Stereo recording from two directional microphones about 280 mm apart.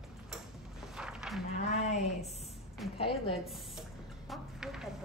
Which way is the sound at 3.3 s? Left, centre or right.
Centre.